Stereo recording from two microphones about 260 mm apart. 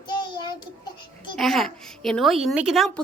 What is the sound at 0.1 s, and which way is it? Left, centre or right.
Child singing, centre.